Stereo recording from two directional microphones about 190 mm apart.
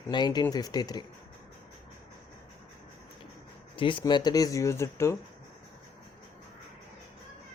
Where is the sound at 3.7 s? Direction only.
25° left (ahead or behind).